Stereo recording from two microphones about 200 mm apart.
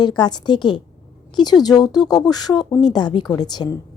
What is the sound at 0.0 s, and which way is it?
Speech, 20° left (ahead or behind).